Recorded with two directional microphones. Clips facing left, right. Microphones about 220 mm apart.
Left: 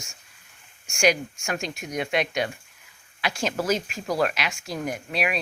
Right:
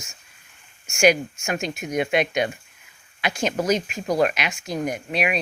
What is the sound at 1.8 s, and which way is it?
Speech, 20° right (ahead or behind).